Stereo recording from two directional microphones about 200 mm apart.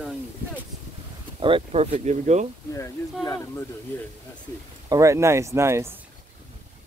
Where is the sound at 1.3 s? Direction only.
25° right (ahead or behind).